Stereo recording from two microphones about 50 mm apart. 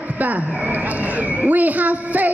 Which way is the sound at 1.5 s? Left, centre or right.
Right.